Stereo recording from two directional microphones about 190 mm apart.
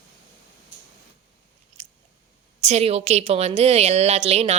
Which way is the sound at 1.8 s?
35° right (ahead or behind).